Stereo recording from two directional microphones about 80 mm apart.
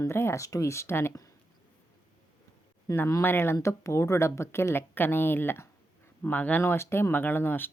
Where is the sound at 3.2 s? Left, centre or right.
Left.